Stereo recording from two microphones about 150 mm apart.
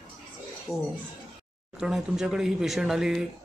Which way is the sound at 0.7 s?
Centre (ahead or behind).